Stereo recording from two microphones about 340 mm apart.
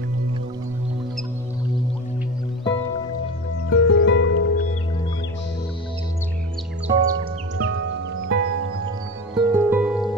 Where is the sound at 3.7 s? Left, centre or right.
Left.